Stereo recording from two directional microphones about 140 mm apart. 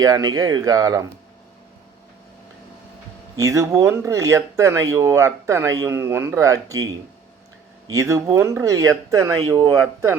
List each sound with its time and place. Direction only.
0.0 s speech: 25° right (ahead or behind)
3.3 s speech: 20° right (ahead or behind)
7.9 s speech: 20° right (ahead or behind)